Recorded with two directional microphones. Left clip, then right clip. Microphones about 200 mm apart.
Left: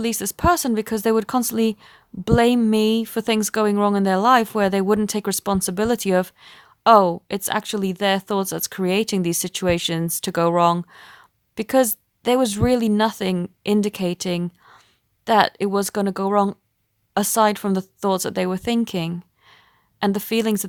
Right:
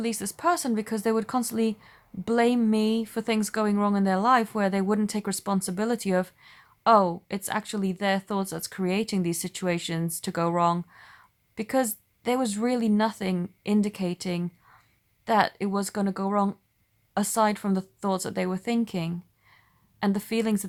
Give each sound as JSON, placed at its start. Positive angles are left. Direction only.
{"t": 0.0, "sound": "speech", "side_deg": 45}